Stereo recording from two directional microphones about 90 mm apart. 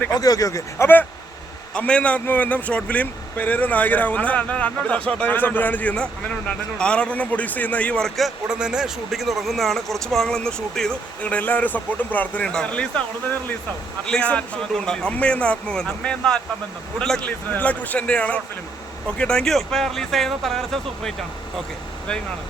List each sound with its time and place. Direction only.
0.2 s speech: 40° left (ahead or behind)
1.7 s speech: 10° left (ahead or behind)
8.4 s speech: 10° right (ahead or behind); by 13.0 s 10° left (ahead or behind)
14.0 s speech: 10° left (ahead or behind)